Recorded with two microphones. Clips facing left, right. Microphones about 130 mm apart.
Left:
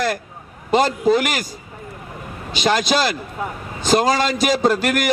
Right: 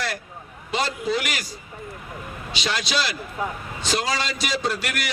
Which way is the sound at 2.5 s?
45° left (ahead or behind).